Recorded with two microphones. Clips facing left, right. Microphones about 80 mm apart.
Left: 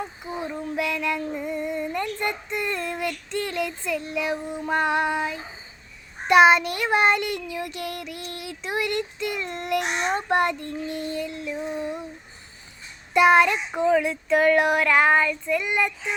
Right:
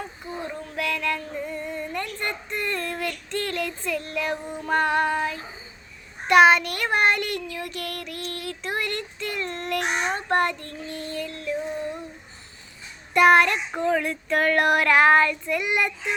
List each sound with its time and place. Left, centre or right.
0.2 s child singing: centre
0.6 s speech: left
3.3 s child singing: centre
6.2 s child singing: centre
13.1 s child singing: centre